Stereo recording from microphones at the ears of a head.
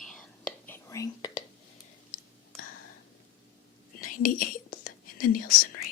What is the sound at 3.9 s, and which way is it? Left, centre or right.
Whispering, left.